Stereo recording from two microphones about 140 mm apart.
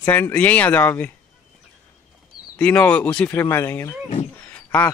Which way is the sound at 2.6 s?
10° left (ahead or behind).